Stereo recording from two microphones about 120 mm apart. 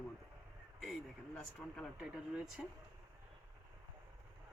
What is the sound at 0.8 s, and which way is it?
Speech, 5° left (ahead or behind).